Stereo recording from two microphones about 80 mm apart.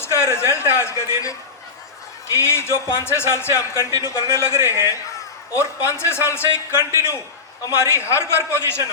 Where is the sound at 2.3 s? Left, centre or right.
Left.